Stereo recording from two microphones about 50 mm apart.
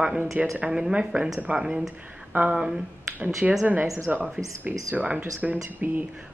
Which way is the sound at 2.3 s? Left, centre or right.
Right.